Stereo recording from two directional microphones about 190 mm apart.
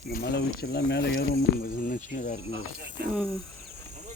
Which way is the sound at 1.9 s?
45° left (ahead or behind).